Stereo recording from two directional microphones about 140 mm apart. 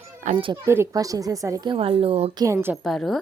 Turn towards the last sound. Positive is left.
turn(degrees=0)  # may be behind; listen again after turning